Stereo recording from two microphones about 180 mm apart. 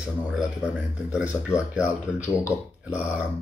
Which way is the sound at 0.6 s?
5° right (ahead or behind).